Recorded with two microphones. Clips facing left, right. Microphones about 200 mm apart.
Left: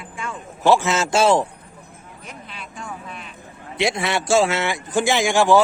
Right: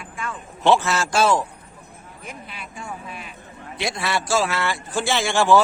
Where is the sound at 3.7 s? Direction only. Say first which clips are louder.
Left 4 dB; 20° left (ahead or behind).